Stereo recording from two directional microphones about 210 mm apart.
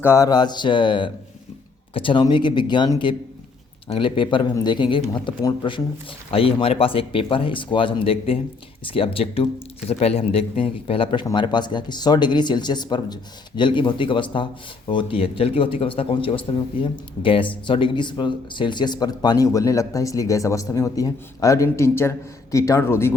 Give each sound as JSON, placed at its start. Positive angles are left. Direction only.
{"t": 0.0, "sound": "a man's voice", "side_deg": 15}